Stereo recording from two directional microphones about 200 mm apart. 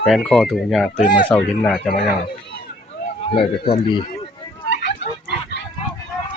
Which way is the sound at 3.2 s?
30° left (ahead or behind).